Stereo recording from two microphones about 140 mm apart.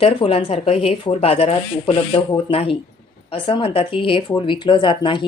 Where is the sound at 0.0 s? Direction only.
40° left (ahead or behind).